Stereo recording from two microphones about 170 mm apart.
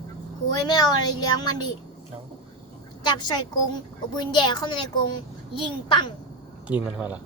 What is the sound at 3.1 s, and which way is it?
Speech, 25° left (ahead or behind).